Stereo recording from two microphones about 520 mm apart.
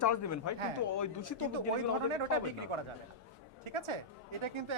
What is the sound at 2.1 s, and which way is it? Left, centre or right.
A woman's voice, right.